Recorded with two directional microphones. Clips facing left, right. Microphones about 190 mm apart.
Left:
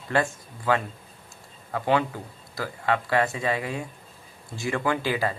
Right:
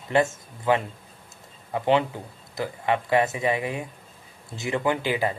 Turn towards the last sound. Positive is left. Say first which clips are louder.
# right 1 dB
turn(degrees=-20)  # may be behind; listen again after turning